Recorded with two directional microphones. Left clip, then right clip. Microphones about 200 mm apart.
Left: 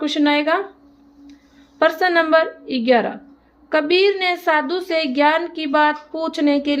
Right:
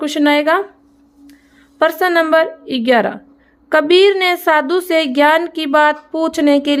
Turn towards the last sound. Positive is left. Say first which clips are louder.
# right 5 dB
turn(degrees=-30)  # may be behind; listen again after turning